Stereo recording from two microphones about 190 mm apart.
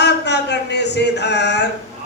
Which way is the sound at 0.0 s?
65° left (ahead or behind).